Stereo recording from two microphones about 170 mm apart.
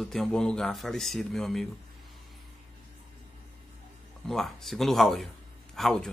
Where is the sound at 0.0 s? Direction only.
Centre (ahead or behind).